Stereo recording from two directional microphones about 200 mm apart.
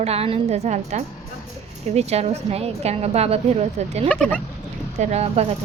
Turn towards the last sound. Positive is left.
turn(degrees=-35)  # may be behind; listen again after turning